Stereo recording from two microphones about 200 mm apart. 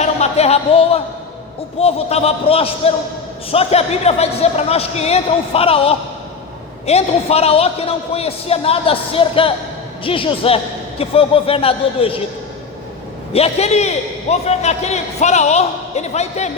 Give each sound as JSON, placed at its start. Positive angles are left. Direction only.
{"t": 0.0, "sound": "a sound", "side_deg": 35}
{"t": 1.8, "sound": "a man's voice", "side_deg": 30}
{"t": 13.3, "sound": "a man's voice", "side_deg": 30}